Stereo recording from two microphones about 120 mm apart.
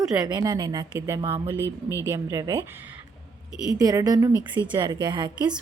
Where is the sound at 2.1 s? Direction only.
30° right (ahead or behind).